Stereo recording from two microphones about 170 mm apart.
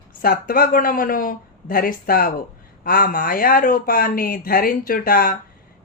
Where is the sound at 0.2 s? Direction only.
60° left (ahead or behind).